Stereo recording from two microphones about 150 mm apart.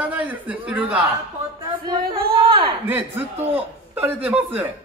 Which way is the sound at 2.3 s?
35° right (ahead or behind).